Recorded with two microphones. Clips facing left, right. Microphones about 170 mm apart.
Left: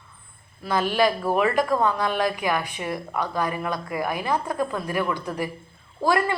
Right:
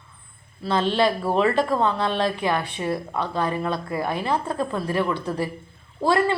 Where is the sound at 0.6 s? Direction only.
25° right (ahead or behind).